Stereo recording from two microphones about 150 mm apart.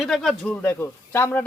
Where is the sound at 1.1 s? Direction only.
15° left (ahead or behind).